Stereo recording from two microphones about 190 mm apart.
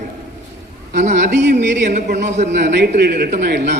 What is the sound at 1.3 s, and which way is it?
Speech, 65° right (ahead or behind).